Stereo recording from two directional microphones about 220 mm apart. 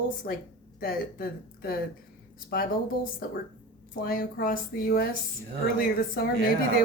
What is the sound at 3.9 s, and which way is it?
A woman's voice, 40° left (ahead or behind).